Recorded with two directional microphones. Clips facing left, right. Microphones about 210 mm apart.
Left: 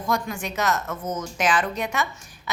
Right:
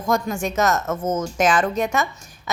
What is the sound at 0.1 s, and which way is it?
A woman's voice, 45° right (ahead or behind).